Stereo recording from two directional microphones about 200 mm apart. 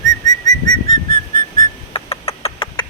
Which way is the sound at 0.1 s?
20° left (ahead or behind).